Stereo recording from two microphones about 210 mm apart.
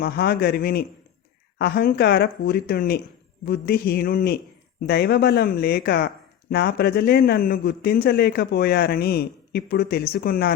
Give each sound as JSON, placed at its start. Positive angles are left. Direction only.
{"t": 0.0, "sound": "a man's voice", "side_deg": 50}